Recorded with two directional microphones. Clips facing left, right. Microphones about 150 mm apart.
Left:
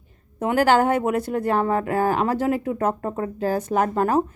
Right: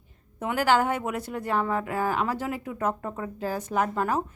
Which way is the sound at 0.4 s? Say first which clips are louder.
Left 5 dB; 45° left (ahead or behind).